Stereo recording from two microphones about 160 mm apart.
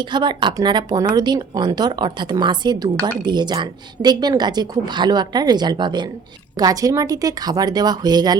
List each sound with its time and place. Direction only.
0.0 s speech: 30° right (ahead or behind)